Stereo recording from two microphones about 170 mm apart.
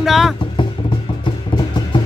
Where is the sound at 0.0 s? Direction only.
Centre (ahead or behind).